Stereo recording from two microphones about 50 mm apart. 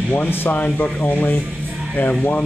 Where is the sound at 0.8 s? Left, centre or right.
Left.